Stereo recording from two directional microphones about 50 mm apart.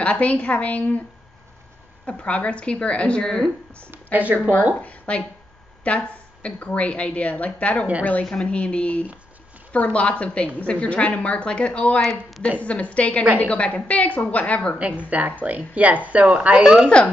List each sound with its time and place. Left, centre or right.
0.0 s a woman's voice: left
2.0 s a woman's voice: left
3.2 s speech: centre
3.9 s speech: right
4.8 s a woman's voice: left
8.3 s a woman's voice: left
12.0 s a woman's voice: centre
12.5 s a woman's voice: left
13.2 s speech: right
13.5 s a woman's voice: left
14.8 s speech: right
17.0 s a woman's voice: left